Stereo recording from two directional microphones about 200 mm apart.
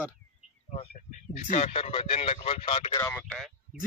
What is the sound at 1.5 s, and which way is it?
Speech, 30° left (ahead or behind).